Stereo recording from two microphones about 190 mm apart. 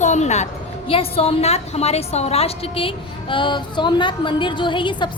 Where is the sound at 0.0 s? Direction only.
40° left (ahead or behind).